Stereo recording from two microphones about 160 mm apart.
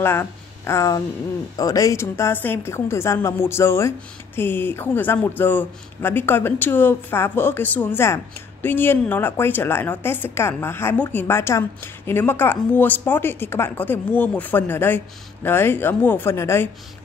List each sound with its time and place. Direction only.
0.0 s a woman's voice: 15° left (ahead or behind)